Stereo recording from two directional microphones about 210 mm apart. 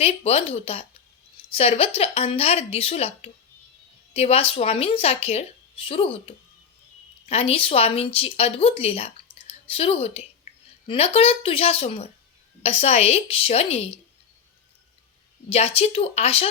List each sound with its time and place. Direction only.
0.0 s speech: 30° left (ahead or behind)
15.4 s speech: 25° left (ahead or behind)